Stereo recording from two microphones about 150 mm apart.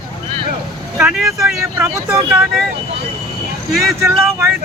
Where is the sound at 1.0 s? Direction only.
5° right (ahead or behind).